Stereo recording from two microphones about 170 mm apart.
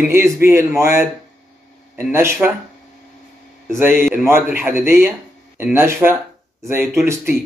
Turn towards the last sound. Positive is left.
turn(degrees=-15)  # may be behind; listen again after turning